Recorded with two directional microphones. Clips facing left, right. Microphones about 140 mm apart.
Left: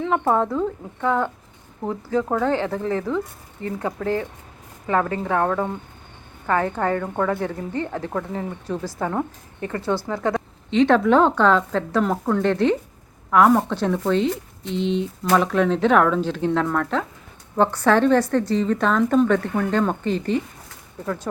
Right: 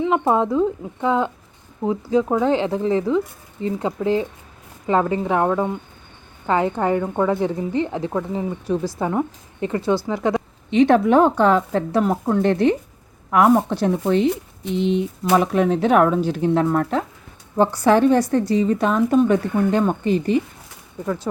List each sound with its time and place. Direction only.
0.0 s a woman's voice: 15° right (ahead or behind)
16.6 s speech: 25° right (ahead or behind)
17.6 s a woman's voice: 10° right (ahead or behind)